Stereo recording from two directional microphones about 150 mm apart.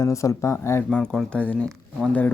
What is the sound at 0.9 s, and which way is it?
Speech, 5° left (ahead or behind).